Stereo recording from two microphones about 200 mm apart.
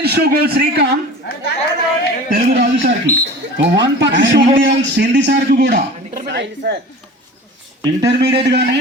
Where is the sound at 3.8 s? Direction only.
65° right (ahead or behind).